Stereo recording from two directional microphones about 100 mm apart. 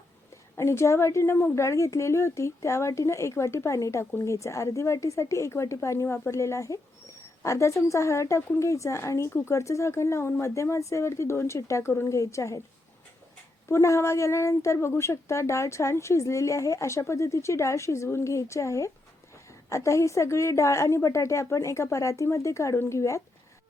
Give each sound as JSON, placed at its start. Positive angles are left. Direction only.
{"t": 0.5, "sound": "a woman's voice", "side_deg": 25}
{"t": 13.7, "sound": "a woman's voice", "side_deg": 30}